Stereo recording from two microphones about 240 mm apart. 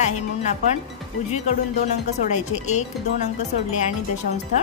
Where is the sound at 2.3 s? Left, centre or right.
Left.